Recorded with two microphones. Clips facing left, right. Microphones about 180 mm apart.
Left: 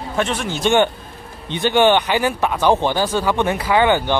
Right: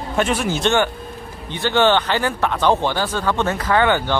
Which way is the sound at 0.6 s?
20° left (ahead or behind).